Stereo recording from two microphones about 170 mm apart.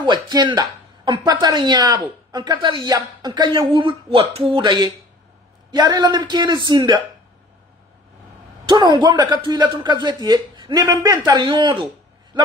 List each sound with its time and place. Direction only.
0.0 s a man's voice: 25° right (ahead or behind)
8.6 s a man's voice: 25° right (ahead or behind)